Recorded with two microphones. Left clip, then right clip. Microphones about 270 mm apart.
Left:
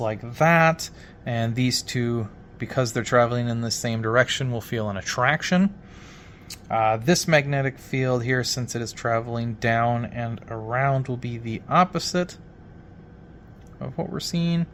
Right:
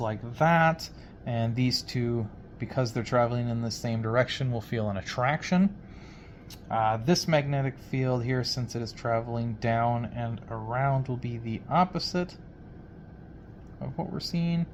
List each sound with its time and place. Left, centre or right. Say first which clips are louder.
0.0 s speech: left 5 dB; left
13.8 s speech: left 5 dB; left